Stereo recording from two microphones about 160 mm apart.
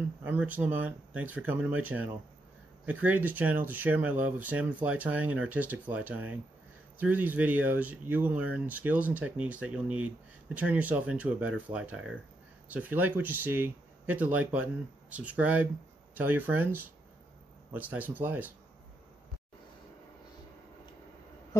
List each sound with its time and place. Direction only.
0.2 s speech: 10° right (ahead or behind)